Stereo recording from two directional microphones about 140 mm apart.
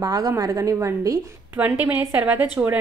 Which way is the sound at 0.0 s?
25° right (ahead or behind).